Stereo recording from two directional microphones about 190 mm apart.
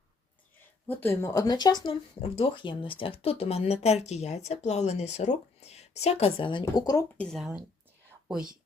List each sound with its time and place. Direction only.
0.9 s speech: 10° left (ahead or behind)
7.2 s speech: centre (ahead or behind)